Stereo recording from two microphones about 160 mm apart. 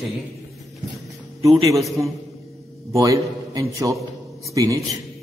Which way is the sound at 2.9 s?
20° right (ahead or behind).